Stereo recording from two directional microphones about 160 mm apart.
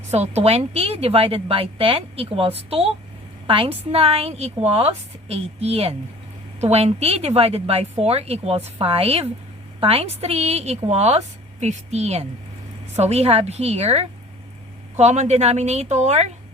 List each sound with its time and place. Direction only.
0.1 s a woman's voice: 45° right (ahead or behind)